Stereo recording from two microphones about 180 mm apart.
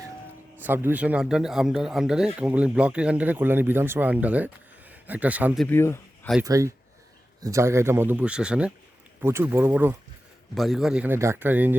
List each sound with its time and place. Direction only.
0.6 s speech: 10° right (ahead or behind)
5.6 s speech: 15° left (ahead or behind)
6.4 s speech: 20° right (ahead or behind)
10.5 s speech: centre (ahead or behind)